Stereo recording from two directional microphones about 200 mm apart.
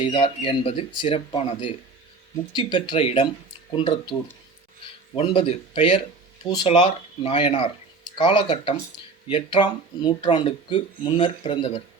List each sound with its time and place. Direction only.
0.0 s speech: 25° left (ahead or behind)
5.1 s speech: 25° left (ahead or behind)